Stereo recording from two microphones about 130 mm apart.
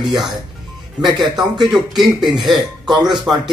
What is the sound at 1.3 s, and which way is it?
Speech, 35° right (ahead or behind).